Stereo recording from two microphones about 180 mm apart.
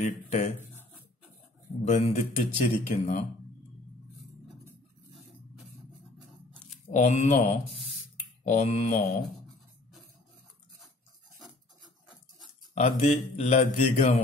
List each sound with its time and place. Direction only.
0.0 s speech: 40° left (ahead or behind)
1.9 s speech: 40° left (ahead or behind)
7.0 s speech: 40° left (ahead or behind)
12.7 s speech: 40° left (ahead or behind)